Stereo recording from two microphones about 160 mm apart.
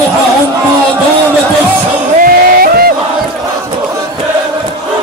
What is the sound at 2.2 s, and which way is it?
Music, 65° right (ahead or behind).